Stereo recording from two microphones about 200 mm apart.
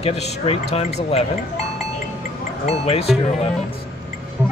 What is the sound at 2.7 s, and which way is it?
Music, 30° left (ahead or behind).